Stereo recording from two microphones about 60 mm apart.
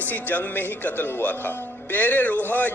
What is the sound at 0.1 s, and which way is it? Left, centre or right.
Speech, left.